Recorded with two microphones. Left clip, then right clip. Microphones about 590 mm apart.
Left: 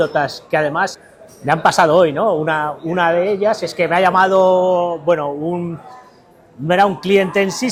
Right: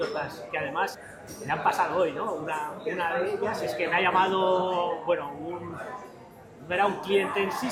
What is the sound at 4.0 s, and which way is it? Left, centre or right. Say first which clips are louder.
Speech: left 11 dB; left.